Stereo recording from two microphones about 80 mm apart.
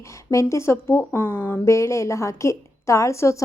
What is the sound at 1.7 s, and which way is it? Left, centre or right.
A woman's voice, left.